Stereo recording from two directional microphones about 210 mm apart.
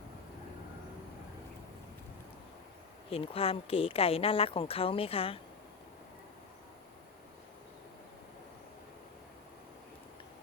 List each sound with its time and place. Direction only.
3.1 s speech: 25° left (ahead or behind)